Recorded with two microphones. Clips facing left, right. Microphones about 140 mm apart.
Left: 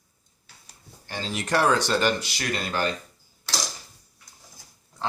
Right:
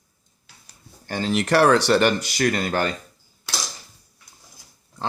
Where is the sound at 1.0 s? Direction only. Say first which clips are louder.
Right 8 dB; 55° right (ahead or behind).